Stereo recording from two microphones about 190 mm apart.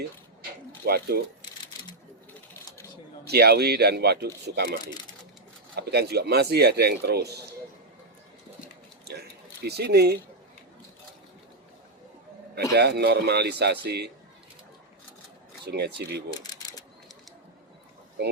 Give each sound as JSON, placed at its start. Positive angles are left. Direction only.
{"t": 0.9, "sound": "speech", "side_deg": -55}
{"t": 3.2, "sound": "speech", "side_deg": -55}
{"t": 5.8, "sound": "speech", "side_deg": -55}
{"t": 9.6, "sound": "speech", "side_deg": -60}
{"t": 12.7, "sound": "speech", "side_deg": -60}
{"t": 15.6, "sound": "speech", "side_deg": -60}
{"t": 16.4, "sound": "a sound", "side_deg": 20}